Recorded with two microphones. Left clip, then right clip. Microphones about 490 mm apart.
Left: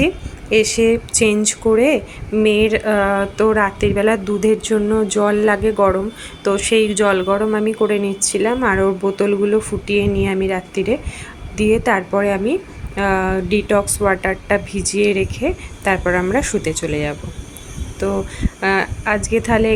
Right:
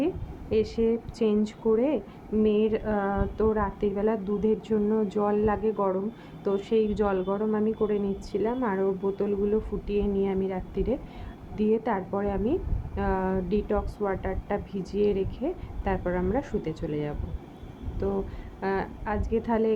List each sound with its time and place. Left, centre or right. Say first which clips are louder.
0.5 s speech: left 11 dB; right
18.6 s speech: left 12 dB; right